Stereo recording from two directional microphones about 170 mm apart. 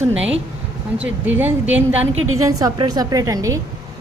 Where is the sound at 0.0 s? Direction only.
10° right (ahead or behind).